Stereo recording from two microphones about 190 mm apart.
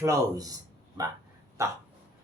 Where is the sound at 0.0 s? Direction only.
20° right (ahead or behind).